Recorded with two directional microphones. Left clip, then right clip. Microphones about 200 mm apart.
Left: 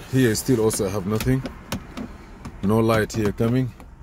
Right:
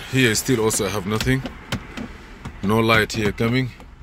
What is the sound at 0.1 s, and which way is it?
Speech, 35° left (ahead or behind).